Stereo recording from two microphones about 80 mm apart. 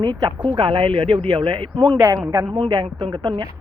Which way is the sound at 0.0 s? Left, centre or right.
Right.